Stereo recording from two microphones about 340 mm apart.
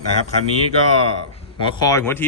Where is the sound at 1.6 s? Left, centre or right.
Centre.